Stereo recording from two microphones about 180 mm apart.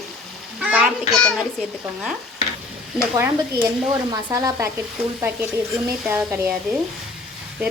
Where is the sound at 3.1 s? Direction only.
15° right (ahead or behind).